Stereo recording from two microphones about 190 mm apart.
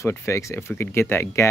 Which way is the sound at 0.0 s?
15° left (ahead or behind).